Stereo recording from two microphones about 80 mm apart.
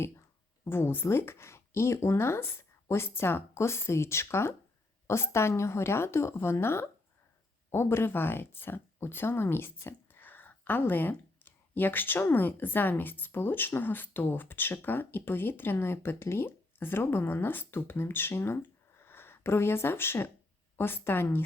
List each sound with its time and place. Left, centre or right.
0.6 s speech: left